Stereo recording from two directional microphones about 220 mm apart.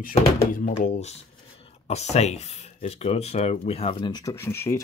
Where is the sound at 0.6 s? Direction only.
30° left (ahead or behind).